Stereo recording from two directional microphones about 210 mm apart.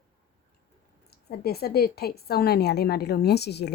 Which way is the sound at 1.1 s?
50° left (ahead or behind).